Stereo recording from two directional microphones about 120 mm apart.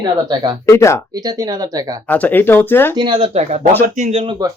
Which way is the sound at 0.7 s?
25° left (ahead or behind).